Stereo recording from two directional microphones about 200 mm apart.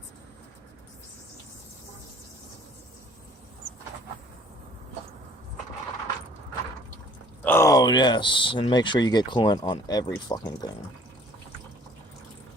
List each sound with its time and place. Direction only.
7.4 s speech: 10° left (ahead or behind)